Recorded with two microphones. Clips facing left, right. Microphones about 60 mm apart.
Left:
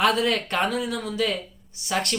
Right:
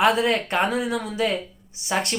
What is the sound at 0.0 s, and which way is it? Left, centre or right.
Speech, right.